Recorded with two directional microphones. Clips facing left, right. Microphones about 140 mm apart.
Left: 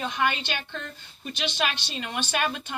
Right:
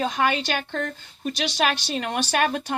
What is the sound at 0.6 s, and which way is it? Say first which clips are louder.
Speech: right 8 dB; 60° right (ahead or behind).